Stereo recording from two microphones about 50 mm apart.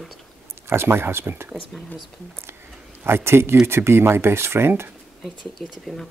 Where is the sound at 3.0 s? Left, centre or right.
Right.